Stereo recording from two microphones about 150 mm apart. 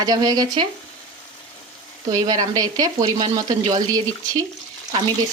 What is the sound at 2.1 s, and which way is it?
A woman's voice, 25° right (ahead or behind).